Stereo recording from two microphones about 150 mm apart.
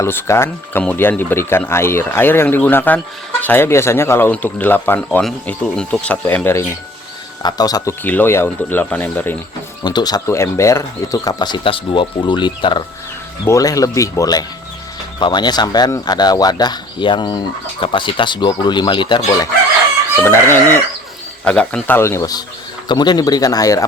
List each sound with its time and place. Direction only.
0.0 s speech: 15° left (ahead or behind)
7.4 s speech: 25° left (ahead or behind)
8.0 s speech: 10° left (ahead or behind)
9.8 s speech: 25° left (ahead or behind)
20.2 s speech: 15° left (ahead or behind)